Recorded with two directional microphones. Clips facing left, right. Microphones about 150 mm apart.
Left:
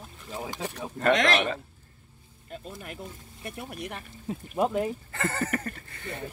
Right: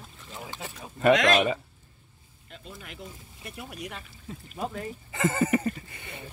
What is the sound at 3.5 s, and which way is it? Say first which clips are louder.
Speech: left 1 dB; 50° left (ahead or behind).